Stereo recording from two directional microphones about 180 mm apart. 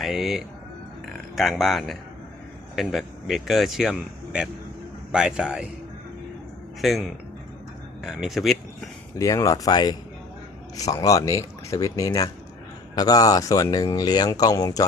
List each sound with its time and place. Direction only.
0.0 s a man's voice: centre (ahead or behind)
6.8 s a man's voice: centre (ahead or behind)
8.0 s a man's voice: centre (ahead or behind)
9.1 s speech: 20° left (ahead or behind)